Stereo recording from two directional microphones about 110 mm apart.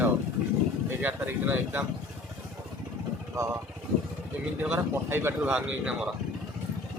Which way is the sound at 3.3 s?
25° right (ahead or behind).